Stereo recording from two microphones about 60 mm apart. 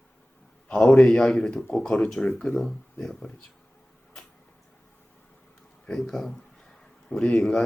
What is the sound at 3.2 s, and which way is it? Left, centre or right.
Speech, left.